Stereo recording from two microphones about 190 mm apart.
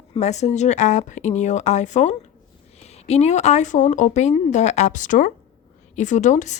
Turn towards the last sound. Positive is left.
turn(degrees=40)  # may be behind; listen again after turning